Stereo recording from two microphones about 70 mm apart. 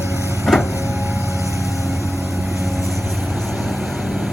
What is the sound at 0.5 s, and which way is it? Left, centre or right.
Vehicle, centre.